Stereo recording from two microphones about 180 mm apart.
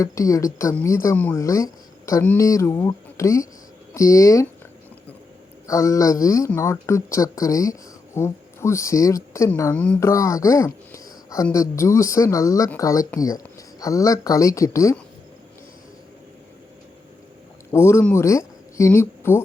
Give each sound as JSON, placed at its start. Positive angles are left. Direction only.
{"t": 0.0, "sound": "speech", "side_deg": 20}
{"t": 5.6, "sound": "speech", "side_deg": 20}
{"t": 17.7, "sound": "speech", "side_deg": 15}